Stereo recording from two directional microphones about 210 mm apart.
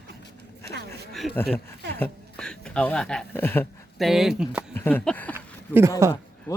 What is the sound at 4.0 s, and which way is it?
Speech, centre (ahead or behind).